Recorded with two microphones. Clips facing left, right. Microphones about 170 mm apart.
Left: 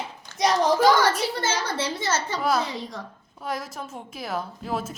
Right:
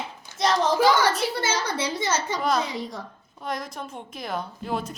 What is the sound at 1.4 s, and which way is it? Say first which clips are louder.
A child's voice: even; 10° right (ahead or behind).